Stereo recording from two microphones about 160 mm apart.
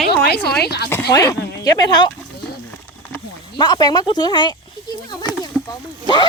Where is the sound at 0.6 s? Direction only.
90° left.